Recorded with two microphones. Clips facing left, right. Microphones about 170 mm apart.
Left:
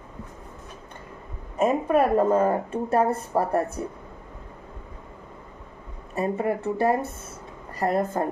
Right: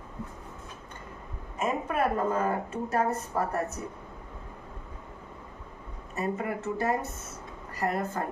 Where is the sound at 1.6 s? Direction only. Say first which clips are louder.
Left 8 dB; 35° left (ahead or behind).